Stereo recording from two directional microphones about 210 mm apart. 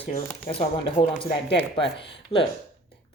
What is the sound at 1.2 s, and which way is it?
Speech, 50° left (ahead or behind).